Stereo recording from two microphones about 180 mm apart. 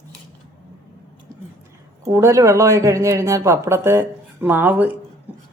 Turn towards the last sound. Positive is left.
turn(degrees=-10)  # may be behind; listen again after turning